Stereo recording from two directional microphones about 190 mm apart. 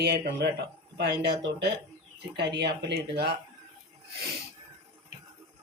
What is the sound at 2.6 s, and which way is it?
Speech, 60° right (ahead or behind).